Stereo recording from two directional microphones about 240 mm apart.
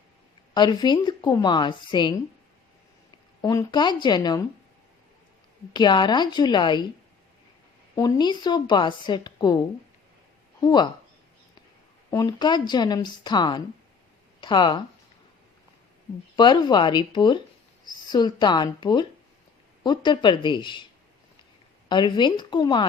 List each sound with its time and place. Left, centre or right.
0.5 s a woman's voice: centre
3.4 s a woman's voice: centre
5.7 s a woman's voice: centre
7.9 s a woman's voice: centre
10.6 s speech: centre
12.1 s a woman's voice: centre
16.3 s a woman's voice: centre
21.8 s speech: centre